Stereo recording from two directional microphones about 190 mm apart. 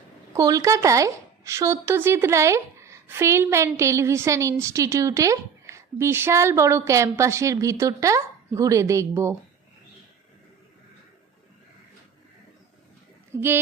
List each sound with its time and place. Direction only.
0.3 s a woman's voice: 20° right (ahead or behind)